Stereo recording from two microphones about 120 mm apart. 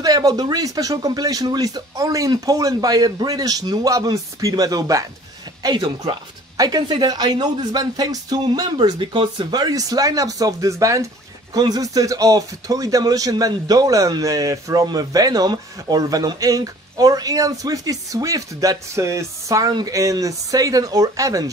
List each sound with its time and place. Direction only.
0.0 s speech: 30° right (ahead or behind)